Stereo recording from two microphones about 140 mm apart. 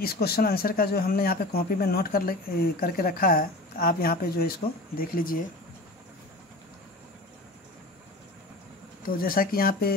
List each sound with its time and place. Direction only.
0.0 s speech: 90° left
9.0 s speech: 90° left